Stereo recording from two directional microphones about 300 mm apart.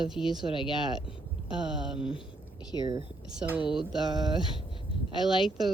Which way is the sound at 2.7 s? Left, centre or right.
Centre.